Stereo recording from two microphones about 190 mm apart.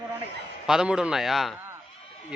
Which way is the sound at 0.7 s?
5° right (ahead or behind).